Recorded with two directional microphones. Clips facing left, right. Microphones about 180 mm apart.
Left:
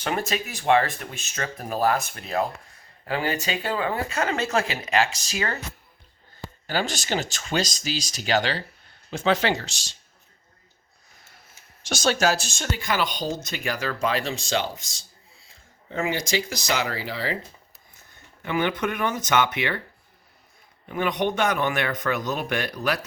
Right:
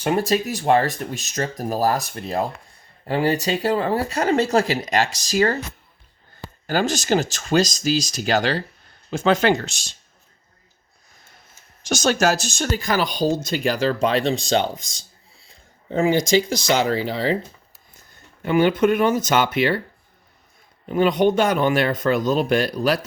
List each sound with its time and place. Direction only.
0.1 s speech: 35° right (ahead or behind)
6.7 s speech: 45° right (ahead or behind)
11.8 s speech: 45° right (ahead or behind)
15.4 s a sound: 30° right (ahead or behind)
16.7 s speech: 30° right (ahead or behind)
18.4 s speech: 30° right (ahead or behind)
20.8 s a man's voice: 30° right (ahead or behind)